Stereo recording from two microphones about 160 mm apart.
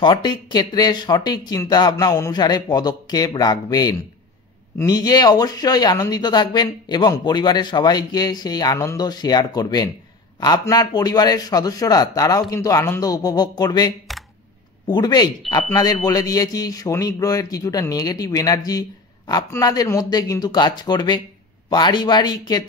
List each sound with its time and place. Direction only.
0.0 s a man's voice: 30° left (ahead or behind)